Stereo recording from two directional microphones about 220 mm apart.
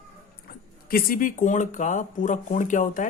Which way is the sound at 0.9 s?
40° left (ahead or behind).